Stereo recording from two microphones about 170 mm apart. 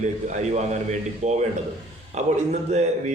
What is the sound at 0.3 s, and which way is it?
A man's voice, 45° right (ahead or behind).